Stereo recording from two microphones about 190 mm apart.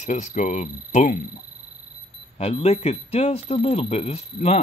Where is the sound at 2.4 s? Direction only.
35° left (ahead or behind).